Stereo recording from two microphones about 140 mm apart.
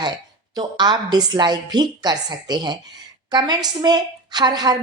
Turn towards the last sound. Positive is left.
turn(degrees=-30)  # may be behind; listen again after turning